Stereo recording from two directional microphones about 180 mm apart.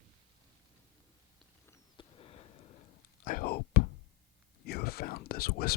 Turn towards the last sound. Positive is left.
turn(degrees=60)  # may be behind; listen again after turning